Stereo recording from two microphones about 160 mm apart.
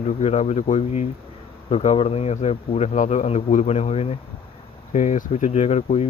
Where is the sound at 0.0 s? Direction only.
45° left (ahead or behind).